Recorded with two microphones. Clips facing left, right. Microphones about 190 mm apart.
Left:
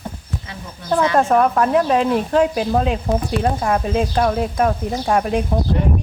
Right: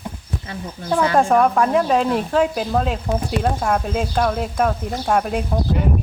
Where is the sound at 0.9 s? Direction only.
5° right (ahead or behind).